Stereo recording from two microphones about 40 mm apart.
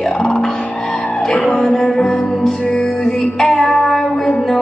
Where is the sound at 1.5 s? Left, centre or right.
Centre.